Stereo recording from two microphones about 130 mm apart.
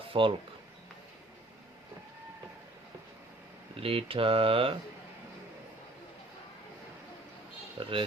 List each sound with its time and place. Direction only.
0.1 s speech: 40° right (ahead or behind)
3.8 s speech: 45° right (ahead or behind)
7.8 s speech: 40° right (ahead or behind)